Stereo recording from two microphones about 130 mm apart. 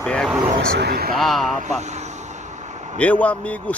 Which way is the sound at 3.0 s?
10° left (ahead or behind).